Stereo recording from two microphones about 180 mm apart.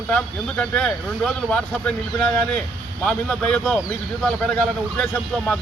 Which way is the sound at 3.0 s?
5° left (ahead or behind).